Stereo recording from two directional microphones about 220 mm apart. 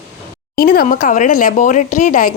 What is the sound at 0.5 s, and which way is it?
Speech, 45° left (ahead or behind).